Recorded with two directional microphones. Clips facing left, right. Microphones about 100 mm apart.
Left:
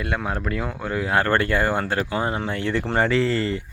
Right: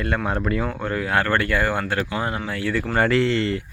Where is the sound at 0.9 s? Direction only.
25° left (ahead or behind).